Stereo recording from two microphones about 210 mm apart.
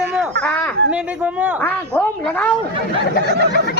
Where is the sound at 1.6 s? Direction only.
10° left (ahead or behind).